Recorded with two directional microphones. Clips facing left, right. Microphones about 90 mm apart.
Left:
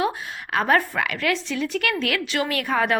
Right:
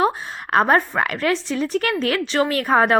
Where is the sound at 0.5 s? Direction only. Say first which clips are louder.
Right 4 dB; 35° right (ahead or behind).